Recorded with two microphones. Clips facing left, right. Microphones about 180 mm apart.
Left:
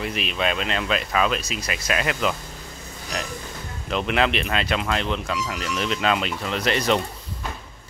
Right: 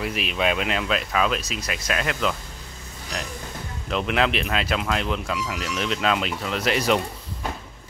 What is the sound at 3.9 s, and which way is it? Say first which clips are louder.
Speech: left 1 dB; centre (ahead or behind).